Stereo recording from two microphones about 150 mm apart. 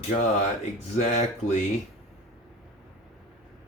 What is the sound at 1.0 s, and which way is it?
Speech, 50° left (ahead or behind).